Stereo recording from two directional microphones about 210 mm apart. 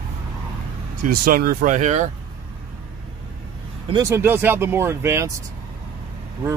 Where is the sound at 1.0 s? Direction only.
40° right (ahead or behind).